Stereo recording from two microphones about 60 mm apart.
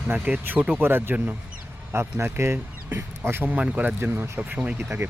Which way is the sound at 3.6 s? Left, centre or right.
Right.